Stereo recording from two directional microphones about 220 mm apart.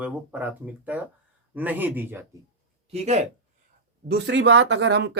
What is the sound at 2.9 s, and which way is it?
Speech, 30° right (ahead or behind).